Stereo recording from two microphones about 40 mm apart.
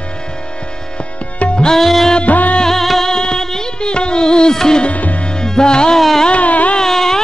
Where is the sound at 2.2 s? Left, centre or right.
Left.